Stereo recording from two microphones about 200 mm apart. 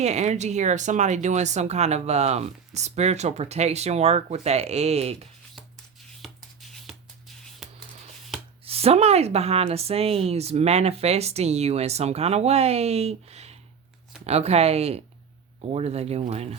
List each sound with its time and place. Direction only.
0.0 s speech: 35° right (ahead or behind)
6.2 s a sound: centre (ahead or behind)
8.6 s speech: 30° right (ahead or behind)